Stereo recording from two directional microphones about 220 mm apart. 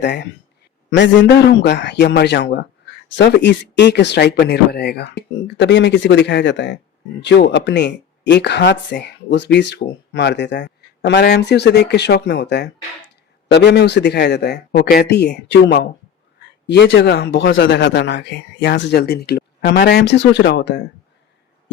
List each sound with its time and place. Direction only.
0.0 s speech: 50° left (ahead or behind)